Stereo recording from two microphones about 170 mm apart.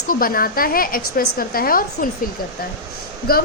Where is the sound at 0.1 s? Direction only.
55° left (ahead or behind).